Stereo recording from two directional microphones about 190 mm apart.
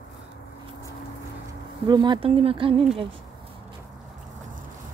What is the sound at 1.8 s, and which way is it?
Speech, 25° right (ahead or behind).